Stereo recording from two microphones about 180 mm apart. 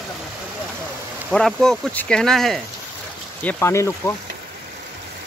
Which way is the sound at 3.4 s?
15° left (ahead or behind).